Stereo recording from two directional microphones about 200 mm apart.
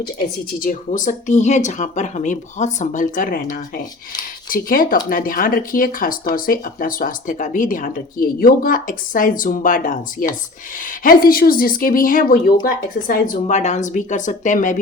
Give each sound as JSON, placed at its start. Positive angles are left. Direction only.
{"t": 0.6, "sound": "speech", "side_deg": 40}